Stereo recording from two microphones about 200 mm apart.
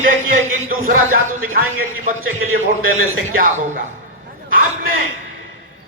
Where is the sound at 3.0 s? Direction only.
45° right (ahead or behind).